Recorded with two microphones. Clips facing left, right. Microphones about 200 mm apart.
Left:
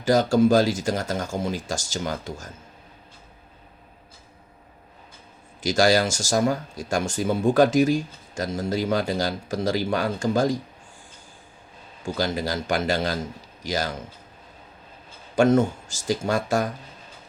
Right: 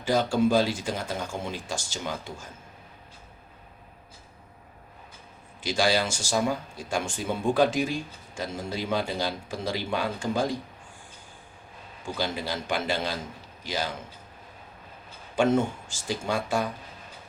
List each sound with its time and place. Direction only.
0.0 s speech: 45° left (ahead or behind)
5.6 s speech: 45° left (ahead or behind)
12.0 s speech: 45° left (ahead or behind)
15.4 s speech: 40° left (ahead or behind)